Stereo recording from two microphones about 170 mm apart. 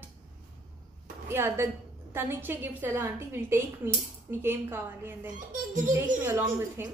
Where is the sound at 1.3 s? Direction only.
15° right (ahead or behind).